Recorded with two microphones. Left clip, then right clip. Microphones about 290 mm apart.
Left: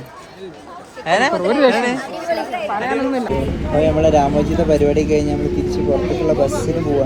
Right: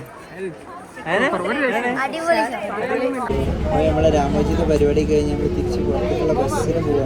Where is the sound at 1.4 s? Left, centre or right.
Centre.